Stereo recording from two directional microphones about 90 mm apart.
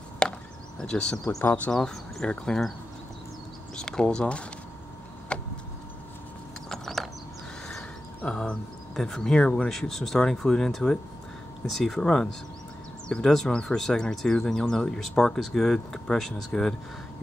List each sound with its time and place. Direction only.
0.2 s chop: 10° left (ahead or behind)
0.7 s speech: 10° left (ahead or behind)
1.4 s speech: 25° left (ahead or behind)
1.7 s speech: 5° left (ahead or behind)
3.7 s speech: 10° left (ahead or behind)
5.3 s a sound: 10° left (ahead or behind)
6.7 s a sound: 5° left (ahead or behind)
8.3 s speech: 10° left (ahead or behind)